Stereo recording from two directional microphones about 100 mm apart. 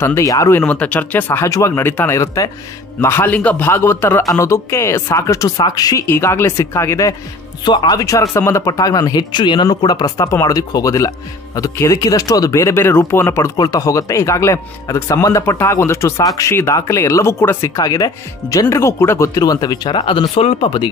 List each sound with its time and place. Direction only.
0.0 s speech: 30° left (ahead or behind)
0.6 s speech: 15° left (ahead or behind)
1.4 s a man's voice: 30° left (ahead or behind)
2.1 s speech: 35° left (ahead or behind)
3.0 s a man's voice: 25° left (ahead or behind)
5.6 s speech: 40° left (ahead or behind)
6.0 s a man's voice: 25° left (ahead or behind)
7.6 s speech: 50° left (ahead or behind)
8.0 s speech: 35° left (ahead or behind)
9.3 s speech: 50° left (ahead or behind); by 13.5 s 25° left (ahead or behind)
13.6 s speech: 35° left (ahead or behind); by 20.9 s 60° left (ahead or behind)